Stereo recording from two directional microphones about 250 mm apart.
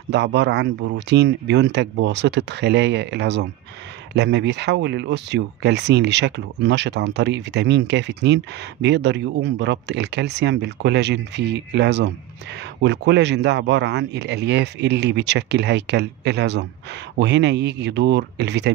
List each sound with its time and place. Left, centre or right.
0.1 s speech: right